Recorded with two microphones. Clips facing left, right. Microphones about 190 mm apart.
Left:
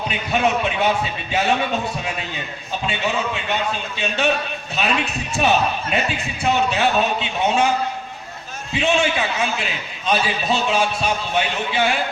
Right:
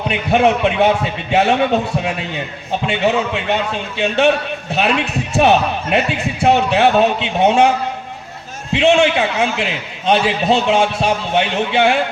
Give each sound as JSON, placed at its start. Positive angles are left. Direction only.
{"t": 0.1, "sound": "a man's voice", "side_deg": -65}
{"t": 5.4, "sound": "a man's voice", "side_deg": -65}
{"t": 8.7, "sound": "a man's voice", "side_deg": -65}